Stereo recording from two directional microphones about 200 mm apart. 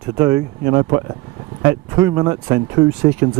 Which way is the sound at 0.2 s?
15° right (ahead or behind).